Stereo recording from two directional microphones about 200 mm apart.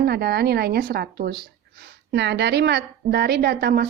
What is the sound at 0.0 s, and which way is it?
A woman's voice, 55° right (ahead or behind).